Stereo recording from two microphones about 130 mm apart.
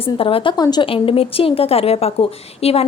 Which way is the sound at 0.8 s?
45° left (ahead or behind).